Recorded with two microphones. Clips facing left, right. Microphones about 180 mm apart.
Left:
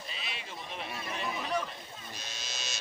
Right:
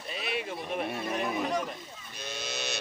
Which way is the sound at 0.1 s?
55° right (ahead or behind).